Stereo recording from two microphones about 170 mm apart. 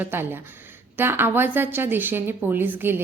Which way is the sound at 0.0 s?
10° right (ahead or behind).